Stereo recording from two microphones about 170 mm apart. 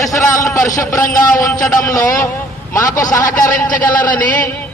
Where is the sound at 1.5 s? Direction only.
50° left (ahead or behind).